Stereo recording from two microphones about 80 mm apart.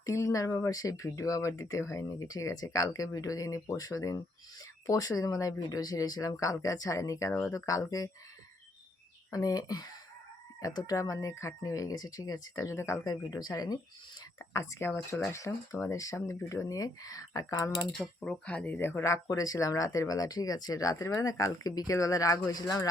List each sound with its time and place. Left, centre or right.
0.0 s speech: left
9.3 s speech: left
13.1 s speech: left
14.3 s speech: left
18.2 s speech: centre
19.0 s speech: left